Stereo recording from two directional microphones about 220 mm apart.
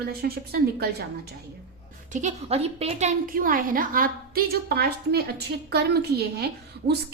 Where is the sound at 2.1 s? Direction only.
30° right (ahead or behind).